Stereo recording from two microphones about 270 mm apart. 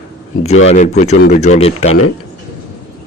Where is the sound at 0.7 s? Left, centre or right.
Left.